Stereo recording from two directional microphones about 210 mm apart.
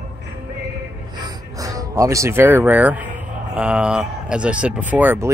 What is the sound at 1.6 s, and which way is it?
Speech, 15° right (ahead or behind).